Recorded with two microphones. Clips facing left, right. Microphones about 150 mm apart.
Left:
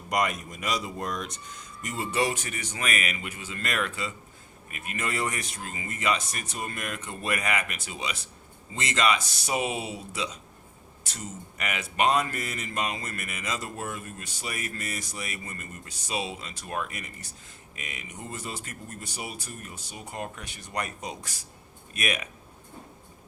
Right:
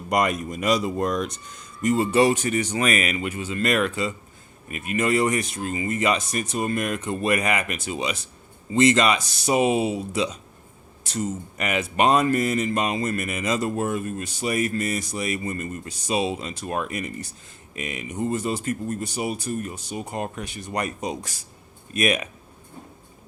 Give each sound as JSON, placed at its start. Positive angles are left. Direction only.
{"t": 0.1, "sound": "speech", "side_deg": -50}
{"t": 2.0, "sound": "speech", "side_deg": -30}
{"t": 11.1, "sound": "speech", "side_deg": -30}